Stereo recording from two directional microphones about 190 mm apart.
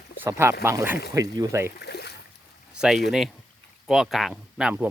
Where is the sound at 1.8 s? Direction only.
60° left (ahead or behind).